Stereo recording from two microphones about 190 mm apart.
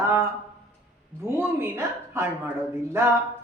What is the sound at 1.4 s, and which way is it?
Speech, 10° right (ahead or behind).